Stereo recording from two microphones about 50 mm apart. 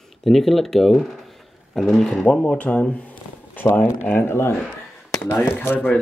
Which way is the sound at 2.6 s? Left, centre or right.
Left.